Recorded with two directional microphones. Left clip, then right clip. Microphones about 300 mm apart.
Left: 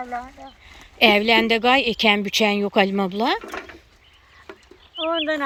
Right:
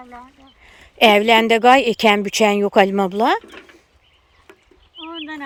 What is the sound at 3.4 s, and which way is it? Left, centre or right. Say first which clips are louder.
Speech: left 7 dB; centre.